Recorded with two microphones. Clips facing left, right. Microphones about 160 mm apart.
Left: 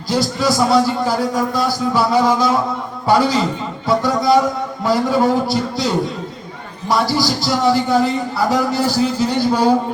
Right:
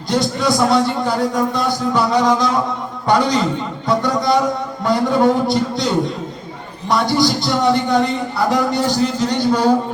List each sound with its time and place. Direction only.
0.1 s a man's voice: 5° left (ahead or behind)